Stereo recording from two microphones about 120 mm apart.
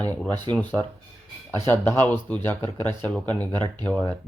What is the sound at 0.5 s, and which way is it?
Speech, 40° right (ahead or behind).